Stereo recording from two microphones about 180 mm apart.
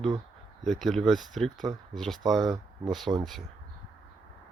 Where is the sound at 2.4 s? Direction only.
20° right (ahead or behind).